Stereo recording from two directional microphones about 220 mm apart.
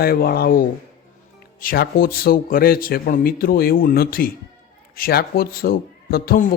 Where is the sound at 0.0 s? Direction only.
45° left (ahead or behind).